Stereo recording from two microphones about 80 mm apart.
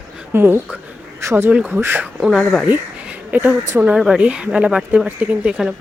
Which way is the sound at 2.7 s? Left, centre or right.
Right.